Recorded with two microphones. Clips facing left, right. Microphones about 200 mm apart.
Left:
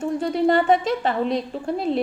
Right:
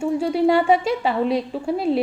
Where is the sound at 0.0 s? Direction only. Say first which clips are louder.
Right 2 dB; 10° right (ahead or behind).